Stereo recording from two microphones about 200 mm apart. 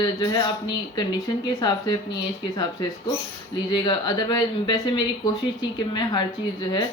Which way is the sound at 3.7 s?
20° left (ahead or behind).